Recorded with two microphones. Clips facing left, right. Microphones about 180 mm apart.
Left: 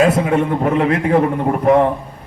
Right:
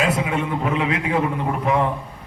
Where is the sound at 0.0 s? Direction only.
50° left (ahead or behind).